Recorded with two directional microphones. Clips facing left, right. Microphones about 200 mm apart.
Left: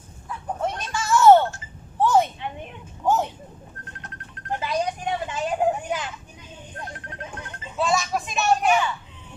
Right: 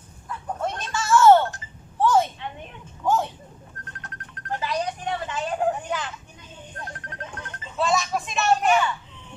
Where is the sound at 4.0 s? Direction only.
20° left (ahead or behind).